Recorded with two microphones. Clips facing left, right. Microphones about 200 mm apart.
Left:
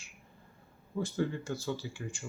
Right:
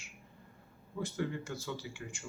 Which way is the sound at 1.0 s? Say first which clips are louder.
Left 3 dB; 30° left (ahead or behind).